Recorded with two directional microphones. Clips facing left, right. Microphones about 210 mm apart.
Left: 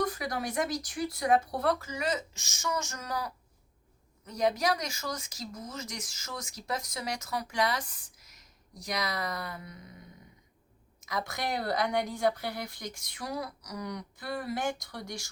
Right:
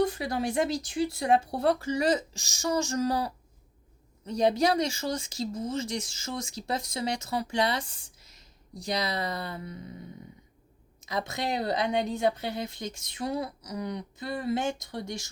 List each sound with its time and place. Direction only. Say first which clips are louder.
0.0 s speech: right 5 dB; 25° right (ahead or behind)
11.0 s speech: right 3 dB; 25° right (ahead or behind)